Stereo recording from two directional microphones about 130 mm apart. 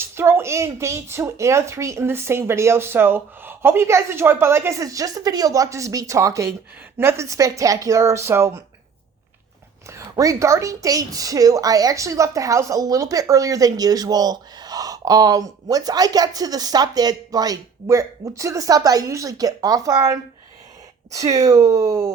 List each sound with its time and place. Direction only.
0.0 s a woman's voice: 20° right (ahead or behind)
9.9 s a woman's voice: 25° right (ahead or behind)